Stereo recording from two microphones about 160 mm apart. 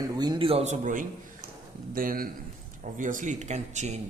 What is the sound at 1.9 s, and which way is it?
Speech, 60° right (ahead or behind).